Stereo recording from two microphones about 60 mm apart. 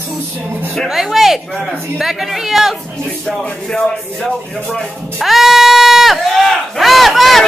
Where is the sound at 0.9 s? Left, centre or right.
Centre.